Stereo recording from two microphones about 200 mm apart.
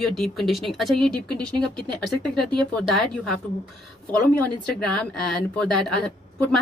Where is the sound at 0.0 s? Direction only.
Centre (ahead or behind).